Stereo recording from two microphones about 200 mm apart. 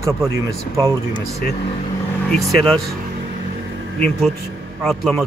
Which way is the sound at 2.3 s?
Centre (ahead or behind).